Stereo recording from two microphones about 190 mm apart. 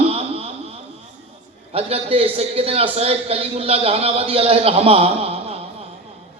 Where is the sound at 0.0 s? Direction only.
30° right (ahead or behind).